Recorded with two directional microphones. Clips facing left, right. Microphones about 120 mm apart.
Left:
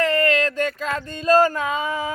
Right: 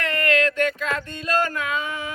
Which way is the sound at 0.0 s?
35° left (ahead or behind).